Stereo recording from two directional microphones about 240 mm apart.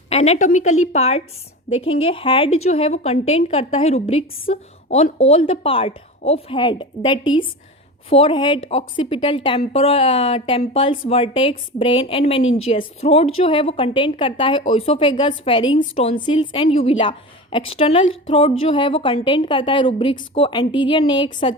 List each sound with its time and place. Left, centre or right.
0.1 s speech: left